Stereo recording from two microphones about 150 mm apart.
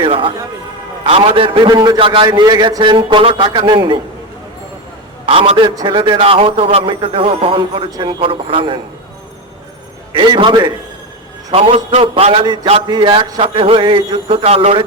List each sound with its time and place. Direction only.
0.0 s music: 35° right (ahead or behind)
1.0 s a man's voice: 40° right (ahead or behind)
5.2 s a man's voice: 40° right (ahead or behind)
7.9 s a man's voice: 25° right (ahead or behind)
8.2 s a man's voice: 35° right (ahead or behind)
10.2 s a man's voice: 35° right (ahead or behind)
14.4 s a man's voice: 40° right (ahead or behind)